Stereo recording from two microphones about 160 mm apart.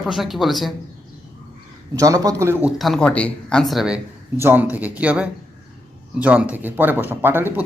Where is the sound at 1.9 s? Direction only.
20° right (ahead or behind).